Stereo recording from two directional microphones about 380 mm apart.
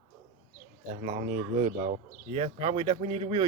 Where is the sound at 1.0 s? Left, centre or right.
Centre.